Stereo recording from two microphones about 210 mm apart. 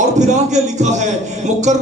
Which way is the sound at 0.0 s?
35° right (ahead or behind).